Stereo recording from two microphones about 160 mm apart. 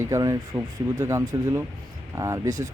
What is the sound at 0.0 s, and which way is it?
Speech, 20° right (ahead or behind).